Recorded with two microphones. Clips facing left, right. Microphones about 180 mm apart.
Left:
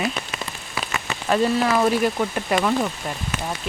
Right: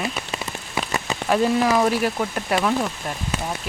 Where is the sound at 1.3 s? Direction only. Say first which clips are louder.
Right 1 dB; 5° right (ahead or behind).